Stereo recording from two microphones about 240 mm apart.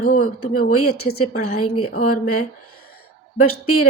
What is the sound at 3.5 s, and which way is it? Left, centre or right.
Speech, left.